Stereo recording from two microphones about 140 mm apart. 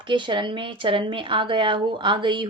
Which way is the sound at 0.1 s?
35° right (ahead or behind).